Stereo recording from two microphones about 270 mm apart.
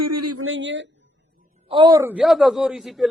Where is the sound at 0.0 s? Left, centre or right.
Right.